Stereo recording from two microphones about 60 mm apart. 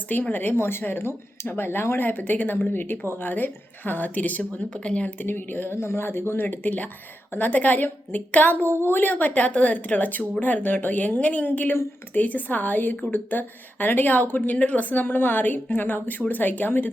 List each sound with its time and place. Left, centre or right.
0.1 s speech: left
5.2 s a woman's voice: left